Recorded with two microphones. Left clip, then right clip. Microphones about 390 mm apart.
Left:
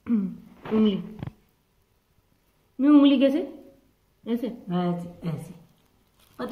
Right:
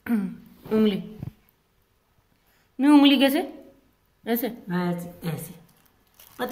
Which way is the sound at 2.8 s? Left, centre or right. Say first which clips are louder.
Right 1 dB; centre.